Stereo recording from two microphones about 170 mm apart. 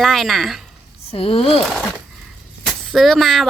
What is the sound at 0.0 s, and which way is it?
Speech, centre (ahead or behind).